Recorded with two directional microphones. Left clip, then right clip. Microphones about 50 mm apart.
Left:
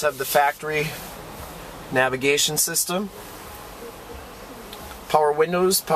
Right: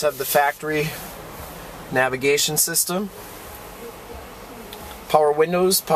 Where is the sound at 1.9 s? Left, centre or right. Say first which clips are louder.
Right 1 dB; right.